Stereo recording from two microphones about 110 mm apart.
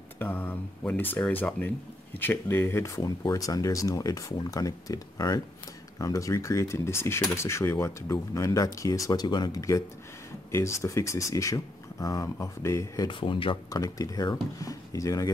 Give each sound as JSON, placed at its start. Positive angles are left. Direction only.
{"t": 0.2, "sound": "speech", "side_deg": 20}
{"t": 13.1, "sound": "speech", "side_deg": 50}
{"t": 13.7, "sound": "speech", "side_deg": 30}